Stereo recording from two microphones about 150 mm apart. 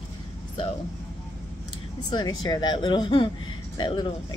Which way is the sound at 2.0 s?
30° left (ahead or behind).